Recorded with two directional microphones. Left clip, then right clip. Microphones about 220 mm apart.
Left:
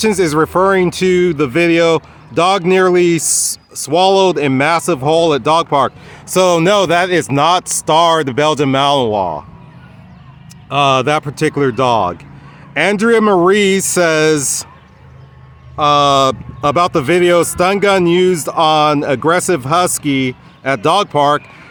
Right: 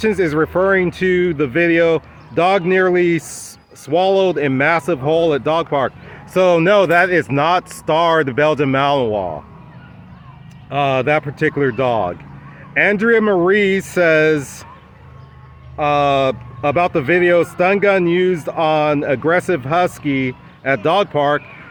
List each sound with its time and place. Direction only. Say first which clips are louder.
0.1 s speech: left 3 dB; 30° left (ahead or behind)
4.9 s speech: left 3 dB; 40° left (ahead or behind)
5.4 s speech: left 5 dB; 30° left (ahead or behind)
9.1 s speech: left 5 dB; 35° left (ahead or behind)
10.7 s speech: left 4 dB; 30° left (ahead or behind)
15.7 s speech: left 4 dB; 30° left (ahead or behind)